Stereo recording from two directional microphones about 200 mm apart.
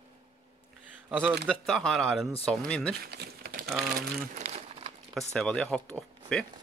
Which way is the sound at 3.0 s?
50° right (ahead or behind).